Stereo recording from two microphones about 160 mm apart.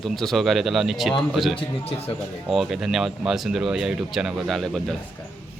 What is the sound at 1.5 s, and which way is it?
Speech, 35° left (ahead or behind).